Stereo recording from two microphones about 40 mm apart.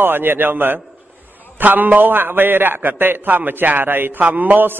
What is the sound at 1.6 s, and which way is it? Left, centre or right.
A man's voice, right.